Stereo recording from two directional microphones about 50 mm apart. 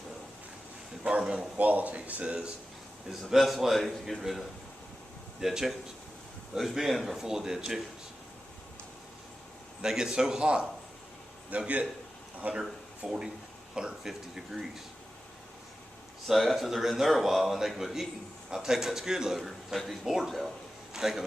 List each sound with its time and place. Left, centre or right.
1.2 s a man's voice: centre
1.5 s speech: right
3.1 s a man's voice: centre
9.8 s a man's voice: centre
11.5 s a man's voice: right
12.5 s a man's voice: centre
16.2 s a man's voice: centre
19.4 s a man's voice: centre